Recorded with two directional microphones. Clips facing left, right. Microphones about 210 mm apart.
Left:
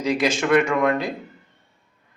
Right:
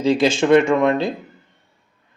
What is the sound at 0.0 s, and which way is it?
Speech, 30° right (ahead or behind).